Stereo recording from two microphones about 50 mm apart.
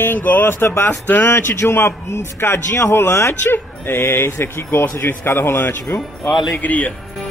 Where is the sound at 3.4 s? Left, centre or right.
Left.